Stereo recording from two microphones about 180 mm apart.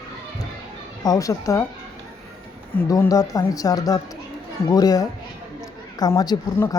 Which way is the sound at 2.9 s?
20° left (ahead or behind).